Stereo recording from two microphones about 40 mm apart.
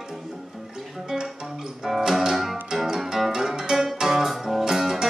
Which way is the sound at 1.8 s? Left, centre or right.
Centre.